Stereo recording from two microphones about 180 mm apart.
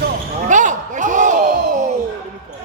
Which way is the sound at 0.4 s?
45° right (ahead or behind).